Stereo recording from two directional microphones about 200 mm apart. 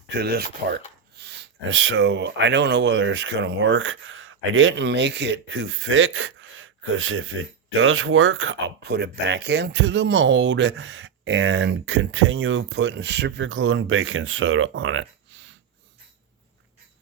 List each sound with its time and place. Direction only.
0.1 s speech: 55° right (ahead or behind)
1.2 s speech: 75° right (ahead or behind)